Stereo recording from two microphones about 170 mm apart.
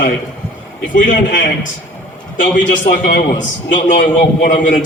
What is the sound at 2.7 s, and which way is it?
Speech, 55° left (ahead or behind).